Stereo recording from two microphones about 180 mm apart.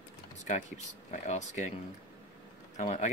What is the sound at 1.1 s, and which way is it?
Speech, 40° left (ahead or behind).